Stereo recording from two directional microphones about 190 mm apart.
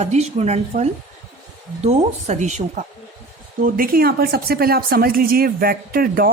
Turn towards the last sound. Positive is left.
turn(degrees=-50)  # may be behind; listen again after turning